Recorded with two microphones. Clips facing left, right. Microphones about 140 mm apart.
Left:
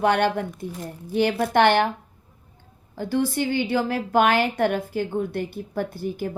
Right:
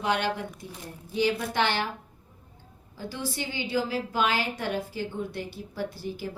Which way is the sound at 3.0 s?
55° left (ahead or behind).